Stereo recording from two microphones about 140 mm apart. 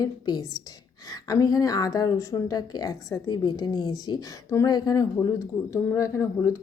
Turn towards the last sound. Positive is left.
turn(degrees=20)  # may be behind; listen again after turning